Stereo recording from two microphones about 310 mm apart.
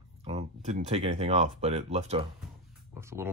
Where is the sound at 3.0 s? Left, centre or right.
Centre.